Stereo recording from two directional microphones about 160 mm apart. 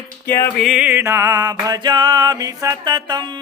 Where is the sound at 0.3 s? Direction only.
15° left (ahead or behind).